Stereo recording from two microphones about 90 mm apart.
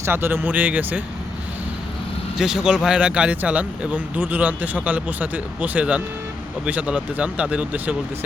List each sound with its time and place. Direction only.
0.0 s speech: 25° right (ahead or behind)
2.4 s speech: 10° right (ahead or behind)